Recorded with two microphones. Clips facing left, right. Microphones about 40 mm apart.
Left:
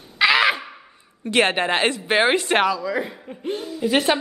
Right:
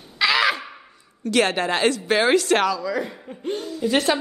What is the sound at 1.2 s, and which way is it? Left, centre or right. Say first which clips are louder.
A woman's voice: left 1 dB; left.